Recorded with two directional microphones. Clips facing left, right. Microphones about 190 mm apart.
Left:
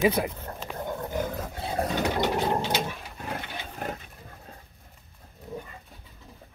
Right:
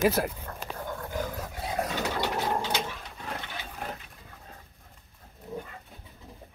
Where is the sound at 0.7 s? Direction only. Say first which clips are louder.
Left 4 dB; 20° left (ahead or behind).